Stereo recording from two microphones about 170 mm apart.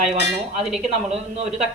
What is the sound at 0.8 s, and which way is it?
Speech, 40° right (ahead or behind).